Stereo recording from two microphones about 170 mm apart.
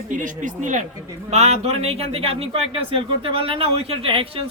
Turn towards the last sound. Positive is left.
turn(degrees=-30)  # may be behind; listen again after turning